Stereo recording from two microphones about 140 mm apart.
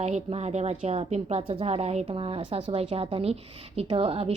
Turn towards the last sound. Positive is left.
turn(degrees=-45)  # may be behind; listen again after turning